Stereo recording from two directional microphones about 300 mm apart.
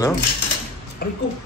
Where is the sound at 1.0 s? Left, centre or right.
Left.